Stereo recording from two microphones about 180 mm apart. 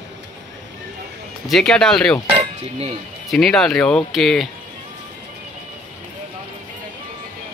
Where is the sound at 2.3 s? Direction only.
35° right (ahead or behind).